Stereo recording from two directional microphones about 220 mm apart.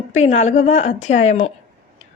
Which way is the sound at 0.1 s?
30° left (ahead or behind).